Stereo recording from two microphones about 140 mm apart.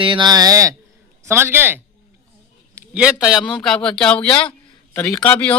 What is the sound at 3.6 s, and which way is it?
Speech, 5° left (ahead or behind).